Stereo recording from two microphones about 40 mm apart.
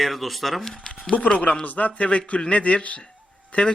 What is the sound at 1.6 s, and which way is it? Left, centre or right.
A man's voice, left.